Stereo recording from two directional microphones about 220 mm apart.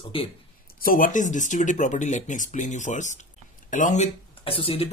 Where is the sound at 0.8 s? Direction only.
40° left (ahead or behind).